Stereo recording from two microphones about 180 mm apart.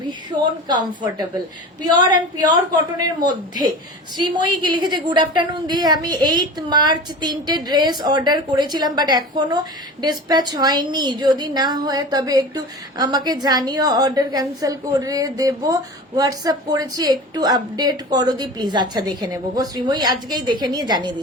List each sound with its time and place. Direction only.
0.1 s a woman's voice: 25° right (ahead or behind)
3.2 s a woman's voice: 25° right (ahead or behind)